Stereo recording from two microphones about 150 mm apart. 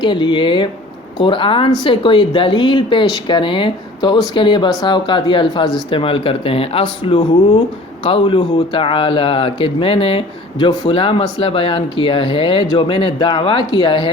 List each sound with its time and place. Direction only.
0.0 s speech: 30° left (ahead or behind)